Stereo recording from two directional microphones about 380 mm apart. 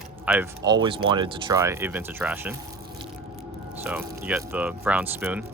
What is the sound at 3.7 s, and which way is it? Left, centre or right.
Speech, centre.